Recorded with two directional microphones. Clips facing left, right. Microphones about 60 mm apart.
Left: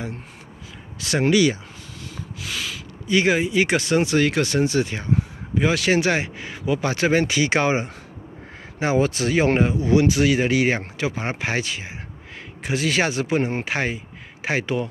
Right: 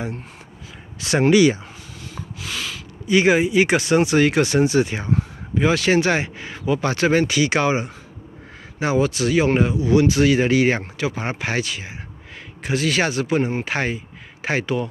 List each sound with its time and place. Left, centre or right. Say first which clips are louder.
0.9 s speech: right 3 dB; right
2.1 s snort: right 1 dB; centre
3.1 s speech: right 3 dB; centre
5.1 s speech: left 3 dB; centre
7.2 s speech: right 1 dB; left
8.9 s speech: right 2 dB; left
10.0 s speech: right 2 dB; centre
11.0 s speech: right 1 dB; left